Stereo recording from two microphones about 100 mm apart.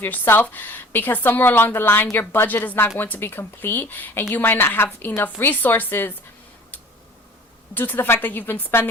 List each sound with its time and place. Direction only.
0.0 s a woman's voice: 20° left (ahead or behind)
7.7 s a woman's voice: 20° left (ahead or behind)